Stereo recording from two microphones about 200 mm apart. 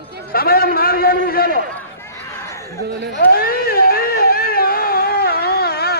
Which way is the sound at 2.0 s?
15° left (ahead or behind).